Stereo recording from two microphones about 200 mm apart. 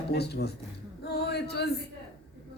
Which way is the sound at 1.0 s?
55° left (ahead or behind).